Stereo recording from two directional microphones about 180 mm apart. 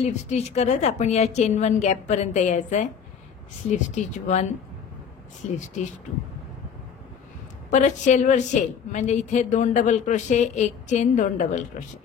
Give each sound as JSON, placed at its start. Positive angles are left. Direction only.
{"t": 0.0, "sound": "a woman's voice", "side_deg": 40}
{"t": 7.7, "sound": "a woman's voice", "side_deg": 40}